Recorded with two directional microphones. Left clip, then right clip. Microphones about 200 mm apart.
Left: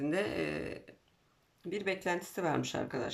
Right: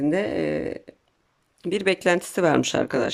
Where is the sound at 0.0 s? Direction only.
35° right (ahead or behind).